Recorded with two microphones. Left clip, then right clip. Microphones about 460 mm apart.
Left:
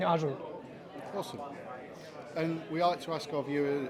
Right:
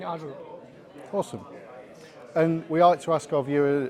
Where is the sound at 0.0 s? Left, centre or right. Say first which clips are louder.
Left 4 dB; left.